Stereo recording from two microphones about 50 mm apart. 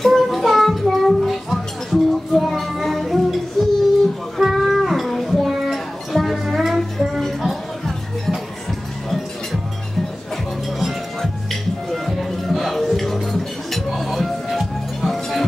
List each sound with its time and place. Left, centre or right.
0.0 s music: centre
11.9 s music: centre